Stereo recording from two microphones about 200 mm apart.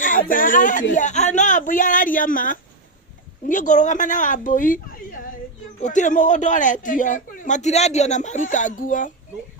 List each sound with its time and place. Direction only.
0.0 s a man's voice: 45° left (ahead or behind)
5.8 s a man's voice: 40° left (ahead or behind)